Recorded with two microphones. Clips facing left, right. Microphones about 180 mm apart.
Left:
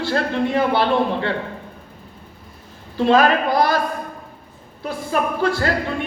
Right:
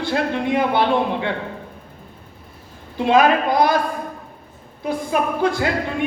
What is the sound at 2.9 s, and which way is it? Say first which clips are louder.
Speech: even; 15° right (ahead or behind).